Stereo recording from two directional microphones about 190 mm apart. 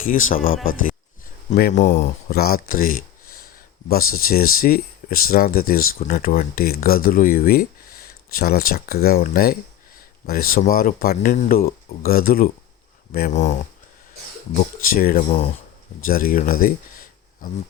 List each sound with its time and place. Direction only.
0.0 s speech: 45° left (ahead or behind)
1.7 s speech: 40° left (ahead or behind)
14.5 s speech: 50° left (ahead or behind)